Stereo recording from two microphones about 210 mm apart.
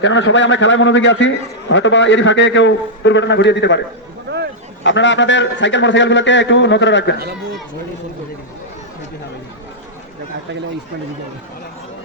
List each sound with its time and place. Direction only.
0.0 s a man's voice: 60° left (ahead or behind)
4.8 s a man's voice: 60° left (ahead or behind)